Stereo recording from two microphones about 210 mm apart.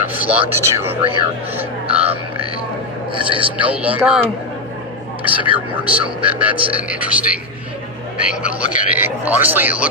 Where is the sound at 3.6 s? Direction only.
5° right (ahead or behind).